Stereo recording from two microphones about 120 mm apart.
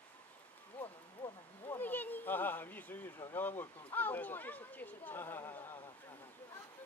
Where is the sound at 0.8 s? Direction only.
10° left (ahead or behind).